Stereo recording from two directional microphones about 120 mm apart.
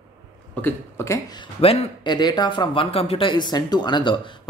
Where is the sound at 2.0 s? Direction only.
35° left (ahead or behind).